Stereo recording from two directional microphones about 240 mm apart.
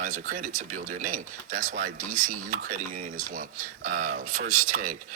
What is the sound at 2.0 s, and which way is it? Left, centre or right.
Speech, right.